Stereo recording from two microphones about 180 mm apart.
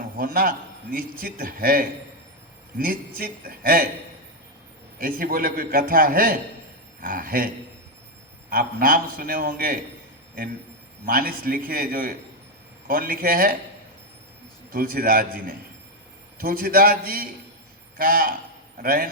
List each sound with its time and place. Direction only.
0.2 s a man's voice: 55° right (ahead or behind)
4.9 s a man's voice: 55° right (ahead or behind)
11.0 s a man's voice: 55° right (ahead or behind)
14.7 s a man's voice: 55° right (ahead or behind)